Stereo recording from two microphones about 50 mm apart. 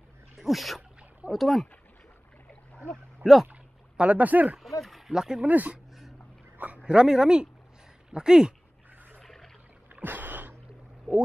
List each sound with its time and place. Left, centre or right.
0.4 s speech: centre
3.2 s speech: right
3.9 s speech: right
4.6 s a sound: centre
5.1 s speech: centre
5.5 s speech: right
6.8 s speech: centre
9.2 s pour: centre
10.0 s a sound: right